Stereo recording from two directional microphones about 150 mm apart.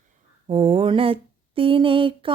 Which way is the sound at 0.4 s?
30° right (ahead or behind).